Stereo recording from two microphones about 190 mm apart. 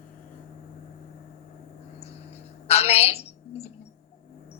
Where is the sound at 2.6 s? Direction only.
35° left (ahead or behind).